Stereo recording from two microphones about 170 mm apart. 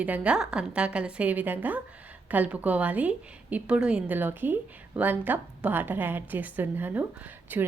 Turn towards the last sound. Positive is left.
turn(degrees=-10)  # may be behind; listen again after turning